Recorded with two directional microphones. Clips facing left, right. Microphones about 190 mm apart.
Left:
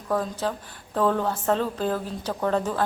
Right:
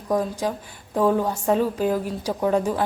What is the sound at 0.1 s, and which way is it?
A woman's voice, 15° right (ahead or behind).